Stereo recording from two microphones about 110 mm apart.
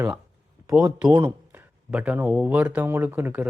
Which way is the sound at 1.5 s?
10° right (ahead or behind).